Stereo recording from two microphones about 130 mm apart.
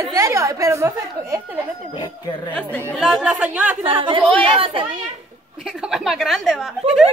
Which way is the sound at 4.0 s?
40° right (ahead or behind).